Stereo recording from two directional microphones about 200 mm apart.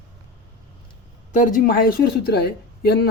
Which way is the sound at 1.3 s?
40° left (ahead or behind).